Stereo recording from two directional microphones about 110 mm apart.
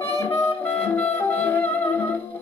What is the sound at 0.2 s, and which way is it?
Music, 15° left (ahead or behind).